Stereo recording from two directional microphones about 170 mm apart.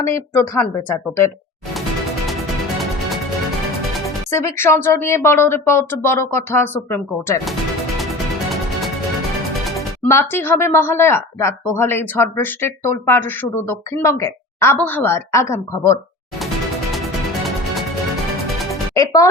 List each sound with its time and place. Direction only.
0.0 s a woman's voice: 15° left (ahead or behind)
4.3 s a woman's voice: 15° left (ahead or behind)
10.1 s a woman's voice: 15° left (ahead or behind)
18.9 s speech: 20° left (ahead or behind)